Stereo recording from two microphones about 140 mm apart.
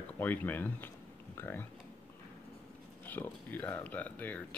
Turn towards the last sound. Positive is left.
turn(degrees=10)  # may be behind; listen again after turning